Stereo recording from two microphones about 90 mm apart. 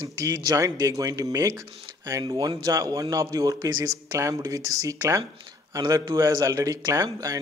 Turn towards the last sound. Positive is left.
turn(degrees=-40)  # may be behind; listen again after turning